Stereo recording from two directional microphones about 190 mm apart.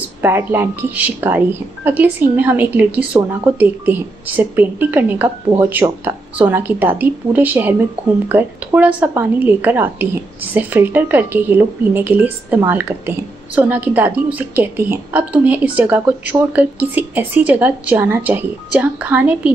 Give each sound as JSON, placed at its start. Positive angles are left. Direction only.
{"t": 0.2, "sound": "a woman's voice", "side_deg": -10}